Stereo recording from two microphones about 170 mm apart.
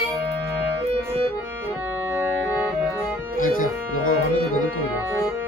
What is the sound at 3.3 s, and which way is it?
Music, 55° left (ahead or behind).